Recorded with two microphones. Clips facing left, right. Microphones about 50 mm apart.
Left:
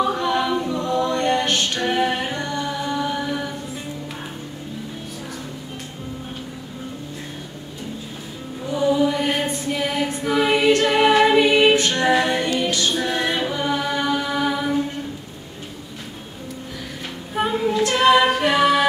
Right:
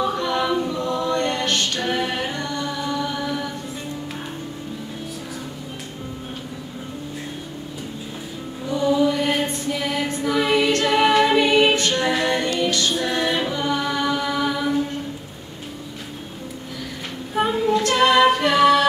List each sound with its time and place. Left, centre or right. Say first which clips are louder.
0.0 s a capella: left 2 dB; centre
8.6 s music: even; centre
13.0 s a capella: even; centre
17.3 s music: right 2 dB; centre